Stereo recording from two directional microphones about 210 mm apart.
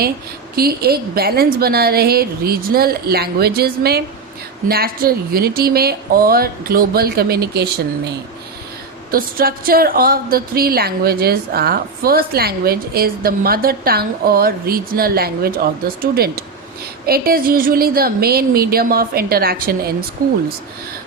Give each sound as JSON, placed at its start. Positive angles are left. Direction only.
{"t": 0.5, "sound": "a woman's voice", "side_deg": -45}
{"t": 9.1, "sound": "a woman's voice", "side_deg": -45}